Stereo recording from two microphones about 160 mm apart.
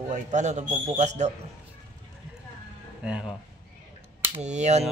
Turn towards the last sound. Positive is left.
turn(degrees=-45)  # may be behind; listen again after turning